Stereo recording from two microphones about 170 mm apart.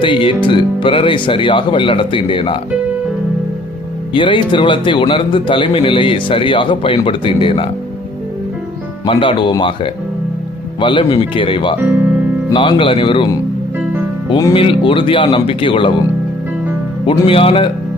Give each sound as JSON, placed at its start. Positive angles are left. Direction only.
{"t": 0.0, "sound": "speech", "side_deg": 30}
{"t": 4.1, "sound": "speech", "side_deg": 30}
{"t": 9.0, "sound": "speech", "side_deg": 30}
{"t": 11.8, "sound": "music", "side_deg": -10}
{"t": 12.5, "sound": "speech", "side_deg": 30}
{"t": 17.1, "sound": "speech", "side_deg": 35}